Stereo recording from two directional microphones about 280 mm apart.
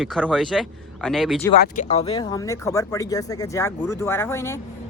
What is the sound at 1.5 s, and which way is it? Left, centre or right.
Speech, left.